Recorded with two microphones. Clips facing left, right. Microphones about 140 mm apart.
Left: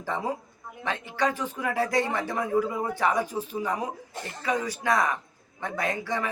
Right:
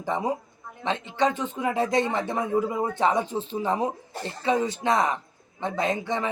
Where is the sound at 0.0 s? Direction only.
20° right (ahead or behind).